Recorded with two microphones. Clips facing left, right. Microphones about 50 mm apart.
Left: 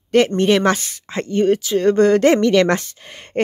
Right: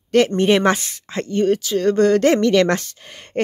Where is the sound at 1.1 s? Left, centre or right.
Centre.